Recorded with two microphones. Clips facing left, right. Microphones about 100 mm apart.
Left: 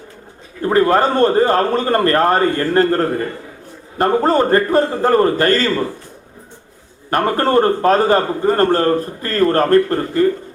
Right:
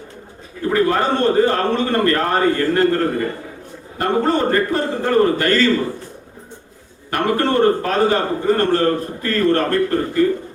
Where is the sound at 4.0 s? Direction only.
40° left (ahead or behind).